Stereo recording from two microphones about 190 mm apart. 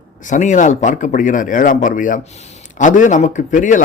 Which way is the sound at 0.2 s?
40° left (ahead or behind).